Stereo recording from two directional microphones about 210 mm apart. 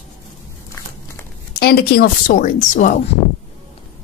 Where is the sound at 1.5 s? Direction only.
45° left (ahead or behind).